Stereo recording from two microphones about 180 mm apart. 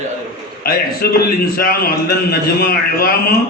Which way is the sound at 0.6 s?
55° left (ahead or behind).